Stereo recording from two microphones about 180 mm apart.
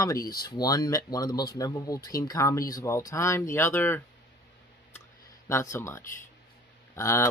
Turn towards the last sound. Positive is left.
turn(degrees=15)  # may be behind; listen again after turning